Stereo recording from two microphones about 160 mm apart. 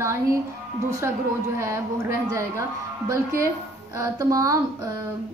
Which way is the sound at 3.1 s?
20° right (ahead or behind).